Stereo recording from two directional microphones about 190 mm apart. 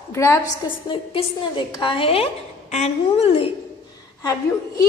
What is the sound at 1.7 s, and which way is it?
A woman's voice, 25° left (ahead or behind).